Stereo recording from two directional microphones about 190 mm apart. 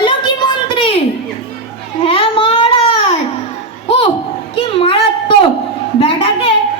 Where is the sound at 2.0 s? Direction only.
30° left (ahead or behind).